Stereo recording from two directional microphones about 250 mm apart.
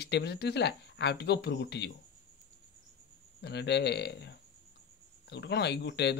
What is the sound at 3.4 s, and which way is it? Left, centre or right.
Speech, left.